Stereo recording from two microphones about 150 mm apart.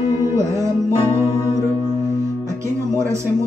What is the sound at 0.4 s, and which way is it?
Music, 20° right (ahead or behind).